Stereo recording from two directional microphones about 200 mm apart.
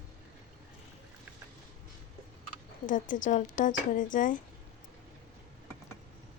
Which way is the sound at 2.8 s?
40° left (ahead or behind).